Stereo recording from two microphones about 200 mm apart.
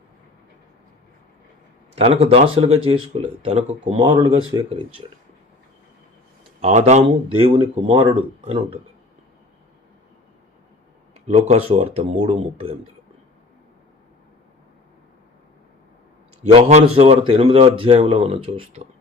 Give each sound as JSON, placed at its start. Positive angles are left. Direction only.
{"t": 2.0, "sound": "speech", "side_deg": -30}
{"t": 6.6, "sound": "speech", "side_deg": -35}
{"t": 11.3, "sound": "speech", "side_deg": -35}
{"t": 16.4, "sound": "speech", "side_deg": -30}